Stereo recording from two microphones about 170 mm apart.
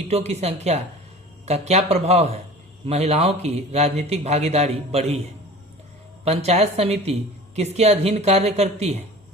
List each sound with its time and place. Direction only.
0.1 s speech: 40° right (ahead or behind)
6.2 s speech: 40° right (ahead or behind)